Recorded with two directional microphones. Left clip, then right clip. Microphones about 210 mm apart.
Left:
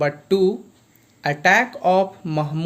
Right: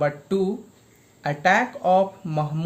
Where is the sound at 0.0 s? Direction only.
30° left (ahead or behind).